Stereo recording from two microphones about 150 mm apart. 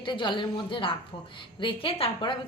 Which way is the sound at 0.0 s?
30° left (ahead or behind).